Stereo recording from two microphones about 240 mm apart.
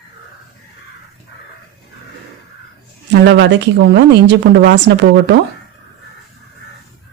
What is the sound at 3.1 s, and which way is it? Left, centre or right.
Speech, right.